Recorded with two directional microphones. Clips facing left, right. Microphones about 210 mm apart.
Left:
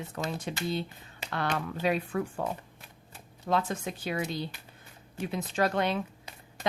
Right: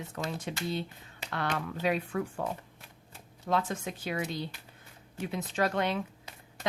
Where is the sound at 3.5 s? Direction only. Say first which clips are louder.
Left 1 dB; 35° left (ahead or behind).